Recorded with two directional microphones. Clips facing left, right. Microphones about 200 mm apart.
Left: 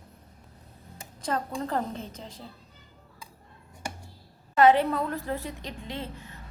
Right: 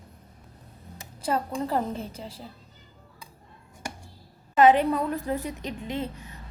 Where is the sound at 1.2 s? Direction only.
5° right (ahead or behind).